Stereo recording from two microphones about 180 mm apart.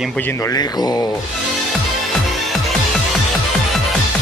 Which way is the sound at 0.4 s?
20° left (ahead or behind).